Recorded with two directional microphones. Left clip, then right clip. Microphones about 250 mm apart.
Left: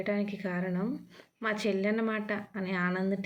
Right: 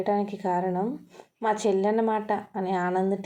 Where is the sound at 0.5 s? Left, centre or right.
Right.